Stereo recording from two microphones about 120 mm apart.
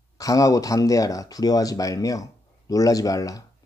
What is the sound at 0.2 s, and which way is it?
Speech, 30° left (ahead or behind).